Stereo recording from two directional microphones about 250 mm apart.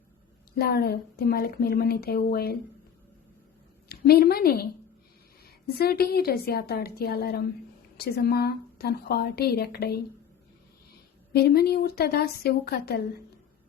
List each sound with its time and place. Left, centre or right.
0.5 s a woman's voice: left
3.8 s a woman's voice: left
5.8 s a woman's voice: left
11.3 s a woman's voice: left